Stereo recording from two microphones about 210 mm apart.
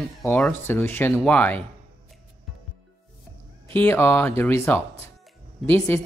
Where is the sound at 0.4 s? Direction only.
10° left (ahead or behind).